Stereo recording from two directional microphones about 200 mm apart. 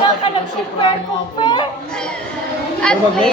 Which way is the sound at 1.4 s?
25° left (ahead or behind).